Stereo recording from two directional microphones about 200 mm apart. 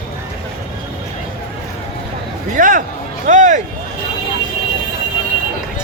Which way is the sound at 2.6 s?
40° right (ahead or behind).